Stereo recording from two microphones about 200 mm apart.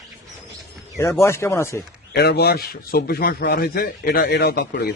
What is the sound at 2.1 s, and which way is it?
Speech, 55° left (ahead or behind).